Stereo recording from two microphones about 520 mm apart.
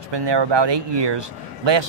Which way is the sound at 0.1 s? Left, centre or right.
Right.